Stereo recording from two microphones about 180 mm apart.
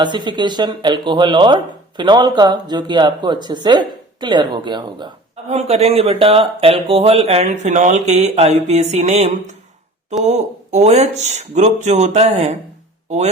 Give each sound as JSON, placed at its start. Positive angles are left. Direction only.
{"t": 0.0, "sound": "speech", "side_deg": -25}
{"t": 5.5, "sound": "speech", "side_deg": -35}